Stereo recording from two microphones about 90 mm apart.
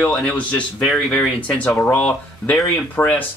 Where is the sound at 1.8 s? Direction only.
20° left (ahead or behind).